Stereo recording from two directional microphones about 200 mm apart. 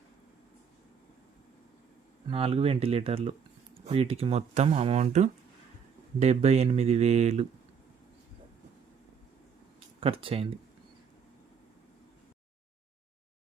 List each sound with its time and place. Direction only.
2.2 s speech: 30° right (ahead or behind)
10.0 s speech: 25° right (ahead or behind)